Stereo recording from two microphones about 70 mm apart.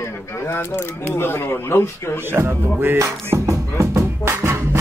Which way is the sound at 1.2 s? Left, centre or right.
Left.